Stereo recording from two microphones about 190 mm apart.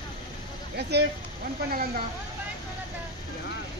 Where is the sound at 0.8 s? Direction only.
60° right (ahead or behind).